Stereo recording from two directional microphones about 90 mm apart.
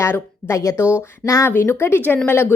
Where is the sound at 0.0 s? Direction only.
30° left (ahead or behind).